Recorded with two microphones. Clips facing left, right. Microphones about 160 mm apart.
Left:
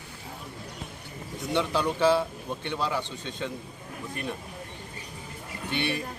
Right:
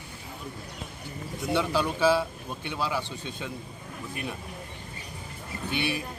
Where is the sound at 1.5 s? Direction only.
10° right (ahead or behind).